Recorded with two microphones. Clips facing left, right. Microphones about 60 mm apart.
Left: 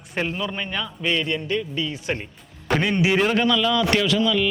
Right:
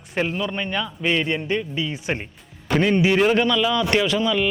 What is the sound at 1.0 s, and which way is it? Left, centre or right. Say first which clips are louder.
A man's voice: right 1 dB; centre.